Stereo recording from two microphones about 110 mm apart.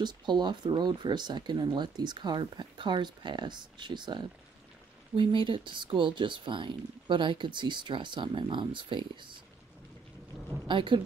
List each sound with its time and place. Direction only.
0.0 s speech: 45° right (ahead or behind)
10.7 s speech: 45° right (ahead or behind)